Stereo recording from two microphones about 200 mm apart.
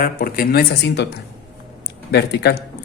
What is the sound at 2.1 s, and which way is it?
Speech, 55° left (ahead or behind).